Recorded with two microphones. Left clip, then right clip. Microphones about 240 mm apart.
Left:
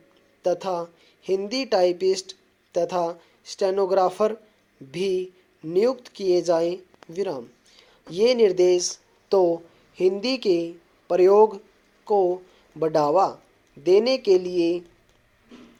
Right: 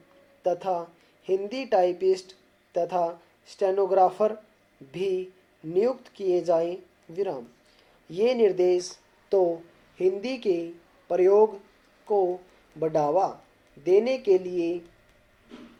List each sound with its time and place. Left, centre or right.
0.4 s speech: left